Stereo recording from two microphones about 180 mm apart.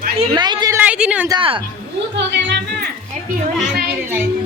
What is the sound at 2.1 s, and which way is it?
Speech, 80° right.